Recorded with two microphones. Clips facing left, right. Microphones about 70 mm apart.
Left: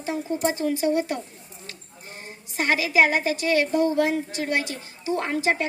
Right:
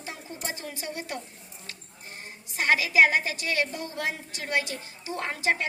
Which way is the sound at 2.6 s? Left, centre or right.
Left.